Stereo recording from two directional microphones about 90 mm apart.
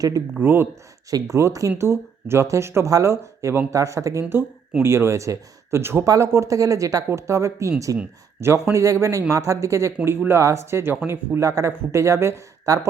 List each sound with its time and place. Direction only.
0.3 s speech: 25° right (ahead or behind); by 8.0 s 40° right (ahead or behind)
8.4 s speech: 30° right (ahead or behind)